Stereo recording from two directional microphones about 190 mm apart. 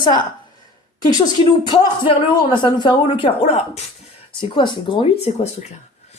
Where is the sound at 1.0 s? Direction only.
20° left (ahead or behind).